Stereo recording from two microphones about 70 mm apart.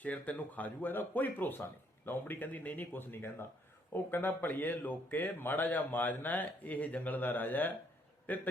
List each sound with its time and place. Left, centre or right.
0.0 s a man's voice: left